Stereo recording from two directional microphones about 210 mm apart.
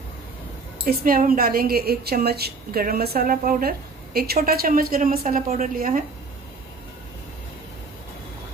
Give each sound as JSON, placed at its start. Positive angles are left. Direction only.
{"t": 0.8, "sound": "a woman's voice", "side_deg": -45}